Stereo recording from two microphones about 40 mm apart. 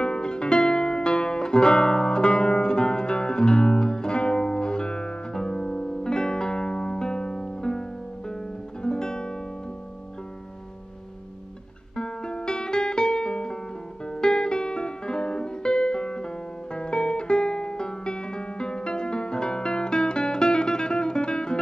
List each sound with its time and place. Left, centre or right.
0.0 s music: left
8.8 s music: centre
11.9 s guitar: left
14.0 s music: centre